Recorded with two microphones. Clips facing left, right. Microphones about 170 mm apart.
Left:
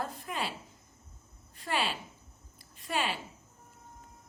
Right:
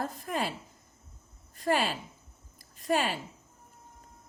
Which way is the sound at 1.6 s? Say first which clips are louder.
Right 5 dB; 45° right (ahead or behind).